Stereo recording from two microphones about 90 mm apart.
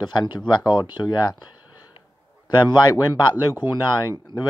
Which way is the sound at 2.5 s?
55° left (ahead or behind).